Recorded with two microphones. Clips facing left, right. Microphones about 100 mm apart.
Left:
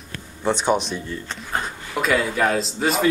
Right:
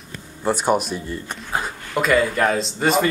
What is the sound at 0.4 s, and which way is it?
Speech, 5° right (ahead or behind).